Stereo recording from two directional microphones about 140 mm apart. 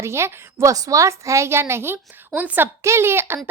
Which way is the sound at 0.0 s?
20° right (ahead or behind).